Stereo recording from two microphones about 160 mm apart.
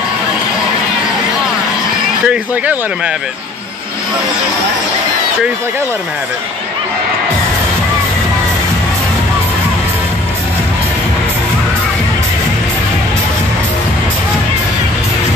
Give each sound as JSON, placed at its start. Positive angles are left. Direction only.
{"t": 2.2, "sound": "speech", "side_deg": -10}